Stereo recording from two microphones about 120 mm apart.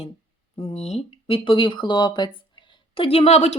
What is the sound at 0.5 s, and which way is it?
Speech, 55° left (ahead or behind).